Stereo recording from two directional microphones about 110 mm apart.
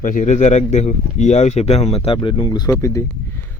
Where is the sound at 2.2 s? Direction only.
40° left (ahead or behind).